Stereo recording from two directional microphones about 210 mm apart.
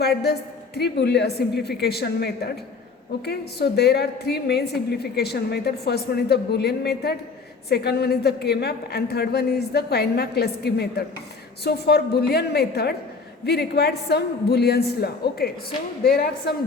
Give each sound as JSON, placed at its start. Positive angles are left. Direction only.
{"t": 0.0, "sound": "a woman's voice", "side_deg": 50}